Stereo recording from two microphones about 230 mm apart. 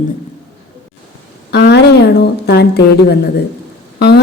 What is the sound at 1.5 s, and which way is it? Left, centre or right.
A woman's voice, left.